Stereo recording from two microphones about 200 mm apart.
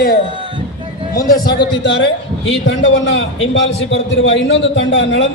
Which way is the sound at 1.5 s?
60° left (ahead or behind).